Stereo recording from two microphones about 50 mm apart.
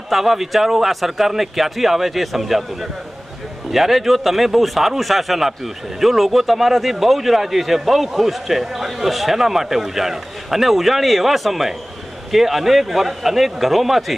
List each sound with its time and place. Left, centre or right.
0.1 s a man's voice: centre